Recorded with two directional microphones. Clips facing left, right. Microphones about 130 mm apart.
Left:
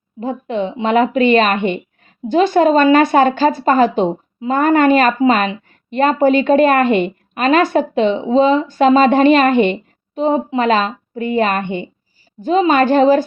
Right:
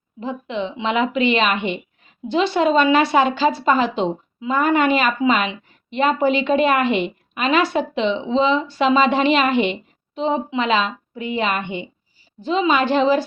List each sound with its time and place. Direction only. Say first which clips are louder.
0.2 s speech: left 5 dB; 45° left (ahead or behind)